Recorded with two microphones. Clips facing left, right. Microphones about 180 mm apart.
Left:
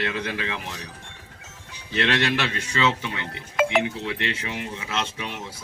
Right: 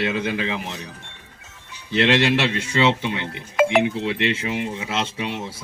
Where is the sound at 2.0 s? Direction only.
25° right (ahead or behind).